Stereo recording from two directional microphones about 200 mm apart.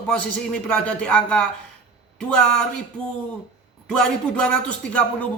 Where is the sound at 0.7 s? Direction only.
5° left (ahead or behind).